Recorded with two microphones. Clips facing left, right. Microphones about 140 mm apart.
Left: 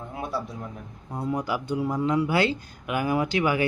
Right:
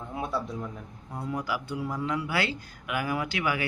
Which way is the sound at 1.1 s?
20° left (ahead or behind).